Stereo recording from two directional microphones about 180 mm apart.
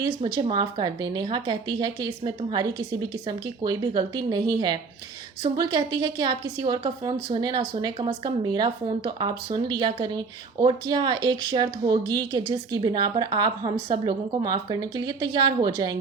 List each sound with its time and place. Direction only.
0.3 s speech: 25° right (ahead or behind)